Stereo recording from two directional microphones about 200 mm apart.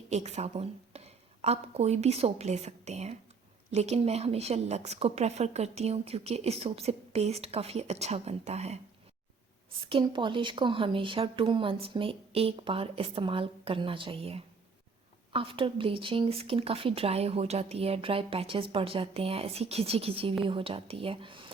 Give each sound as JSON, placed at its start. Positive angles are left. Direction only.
{"t": 0.1, "sound": "a woman's voice", "side_deg": -35}
{"t": 9.8, "sound": "speech", "side_deg": -25}